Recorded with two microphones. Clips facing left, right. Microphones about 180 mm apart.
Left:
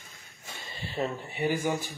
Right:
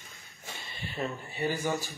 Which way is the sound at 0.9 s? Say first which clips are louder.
Left 3 dB; 20° left (ahead or behind).